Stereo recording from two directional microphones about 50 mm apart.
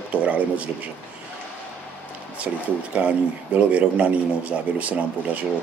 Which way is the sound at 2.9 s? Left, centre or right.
Right.